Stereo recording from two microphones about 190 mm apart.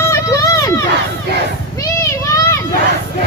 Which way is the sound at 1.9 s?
15° left (ahead or behind).